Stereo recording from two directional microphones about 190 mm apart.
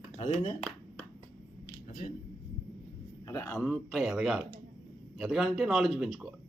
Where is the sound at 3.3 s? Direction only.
10° left (ahead or behind).